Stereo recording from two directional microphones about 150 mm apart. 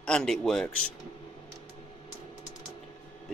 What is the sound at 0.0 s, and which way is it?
Speech, 5° left (ahead or behind).